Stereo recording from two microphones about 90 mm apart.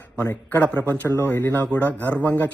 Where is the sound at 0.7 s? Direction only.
20° left (ahead or behind).